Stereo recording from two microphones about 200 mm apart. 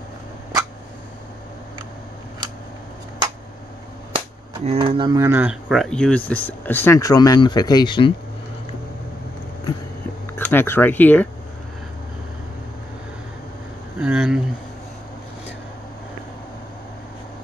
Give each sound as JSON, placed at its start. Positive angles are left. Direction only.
{"t": 4.1, "sound": "speech", "side_deg": -25}
{"t": 10.3, "sound": "speech", "side_deg": 10}
{"t": 13.9, "sound": "a sound", "side_deg": -5}